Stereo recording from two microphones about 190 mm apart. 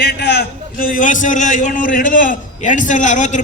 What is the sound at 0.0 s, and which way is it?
Speech, 65° left (ahead or behind).